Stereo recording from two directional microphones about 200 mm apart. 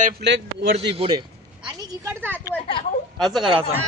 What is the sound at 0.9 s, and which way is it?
A woman's voice, 25° right (ahead or behind).